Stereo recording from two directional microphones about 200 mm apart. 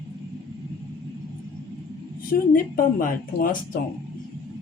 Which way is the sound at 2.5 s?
45° left (ahead or behind).